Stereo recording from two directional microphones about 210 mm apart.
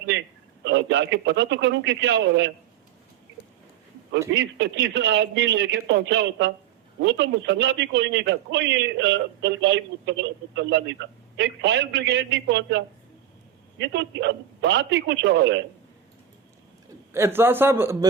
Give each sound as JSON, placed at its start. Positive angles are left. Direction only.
{"t": 0.1, "sound": "a man's voice", "side_deg": -55}
{"t": 4.4, "sound": "a man's voice", "side_deg": -55}
{"t": 17.1, "sound": "a man's voice", "side_deg": -10}